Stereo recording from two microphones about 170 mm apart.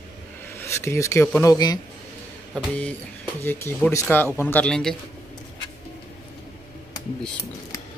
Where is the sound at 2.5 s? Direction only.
10° left (ahead or behind).